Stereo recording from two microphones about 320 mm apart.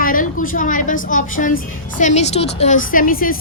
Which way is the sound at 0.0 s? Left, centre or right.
Left.